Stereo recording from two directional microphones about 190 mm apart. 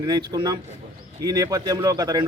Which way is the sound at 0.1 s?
20° right (ahead or behind).